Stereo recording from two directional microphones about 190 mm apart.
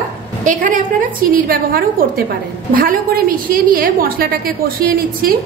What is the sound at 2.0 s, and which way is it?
A woman's voice, 50° right (ahead or behind).